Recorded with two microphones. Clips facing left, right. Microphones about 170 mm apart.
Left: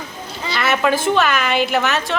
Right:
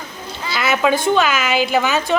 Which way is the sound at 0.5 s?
Centre (ahead or behind).